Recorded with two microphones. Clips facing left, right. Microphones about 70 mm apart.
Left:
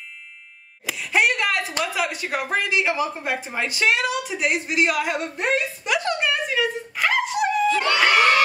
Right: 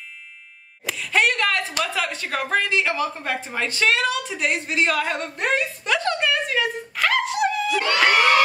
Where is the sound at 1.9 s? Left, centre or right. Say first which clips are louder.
Left 1 dB; centre.